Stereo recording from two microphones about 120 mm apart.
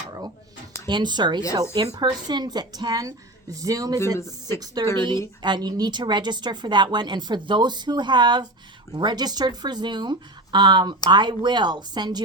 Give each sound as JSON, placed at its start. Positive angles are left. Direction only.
{"t": 0.9, "sound": "speech", "side_deg": -40}